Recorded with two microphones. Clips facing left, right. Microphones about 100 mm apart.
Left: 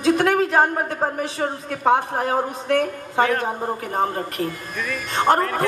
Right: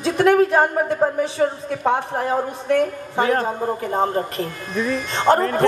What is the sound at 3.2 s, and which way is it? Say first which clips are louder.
A man's voice: right 2 dB; 25° right (ahead or behind).